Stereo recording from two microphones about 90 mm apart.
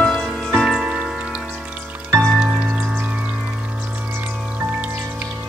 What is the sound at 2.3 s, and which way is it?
Music, 10° right (ahead or behind).